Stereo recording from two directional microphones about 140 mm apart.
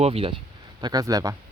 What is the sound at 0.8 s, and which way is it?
Speech, 30° right (ahead or behind).